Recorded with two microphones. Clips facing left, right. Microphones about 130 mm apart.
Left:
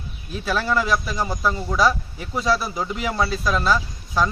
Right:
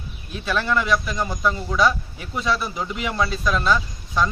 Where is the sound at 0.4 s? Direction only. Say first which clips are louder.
Even; 5° left (ahead or behind).